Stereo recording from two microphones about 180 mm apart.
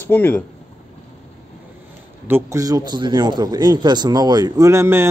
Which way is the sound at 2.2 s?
15° right (ahead or behind).